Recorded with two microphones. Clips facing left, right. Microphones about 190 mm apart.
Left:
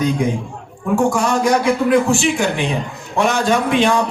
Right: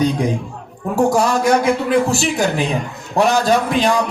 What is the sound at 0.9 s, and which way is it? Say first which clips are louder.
A man's voice: right 1 dB; 40° right (ahead or behind).